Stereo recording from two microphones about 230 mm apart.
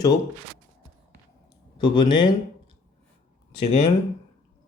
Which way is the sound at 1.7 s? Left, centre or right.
Centre.